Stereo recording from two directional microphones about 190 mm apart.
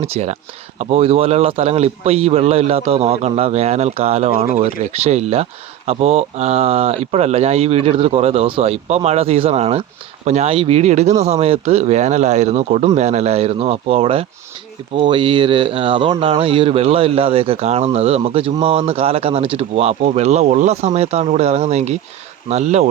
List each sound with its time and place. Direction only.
0.0 s speech: 35° right (ahead or behind)